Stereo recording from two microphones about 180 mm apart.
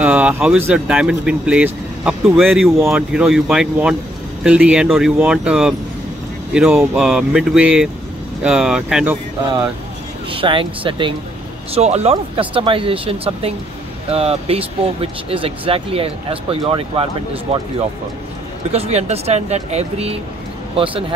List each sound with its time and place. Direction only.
0.0 s speech: 5° right (ahead or behind)
10.3 s speech: 30° right (ahead or behind)
18.7 s speech: 35° right (ahead or behind)